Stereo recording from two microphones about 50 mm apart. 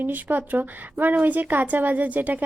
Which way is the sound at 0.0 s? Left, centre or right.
Right.